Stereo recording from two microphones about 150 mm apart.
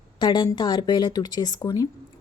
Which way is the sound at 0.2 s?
30° left (ahead or behind).